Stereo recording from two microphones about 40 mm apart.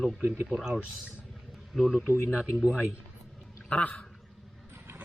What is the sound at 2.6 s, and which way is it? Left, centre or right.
Speech, right.